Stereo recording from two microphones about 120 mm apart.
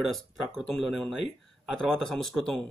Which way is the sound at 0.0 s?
Centre (ahead or behind).